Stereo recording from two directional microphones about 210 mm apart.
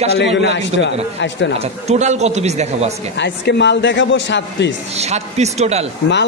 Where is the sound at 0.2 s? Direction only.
55° left (ahead or behind).